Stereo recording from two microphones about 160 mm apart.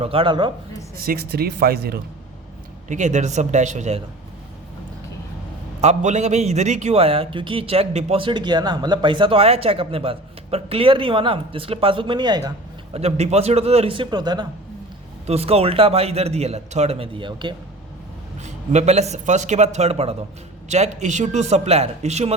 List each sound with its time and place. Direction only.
0.0 s a man's voice: 35° right (ahead or behind)
1.0 s speech: 75° right (ahead or behind)
2.9 s a man's voice: 50° right (ahead or behind)
5.8 s a man's voice: 45° right (ahead or behind); by 12.4 s 30° right (ahead or behind)
12.9 s a man's voice: 40° right (ahead or behind)
15.3 s a man's voice: 40° right (ahead or behind)
18.4 s a man's voice: 45° right (ahead or behind)